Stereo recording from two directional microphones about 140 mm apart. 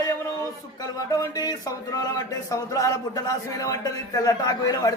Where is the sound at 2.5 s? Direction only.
25° left (ahead or behind).